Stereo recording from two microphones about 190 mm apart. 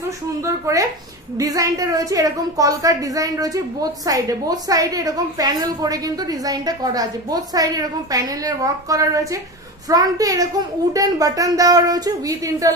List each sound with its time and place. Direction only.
0.4 s a woman's voice: 15° right (ahead or behind)